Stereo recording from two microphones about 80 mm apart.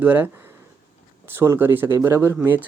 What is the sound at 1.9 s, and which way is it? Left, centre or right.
Speech, right.